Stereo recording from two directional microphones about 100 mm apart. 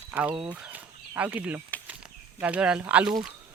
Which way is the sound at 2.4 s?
10° right (ahead or behind).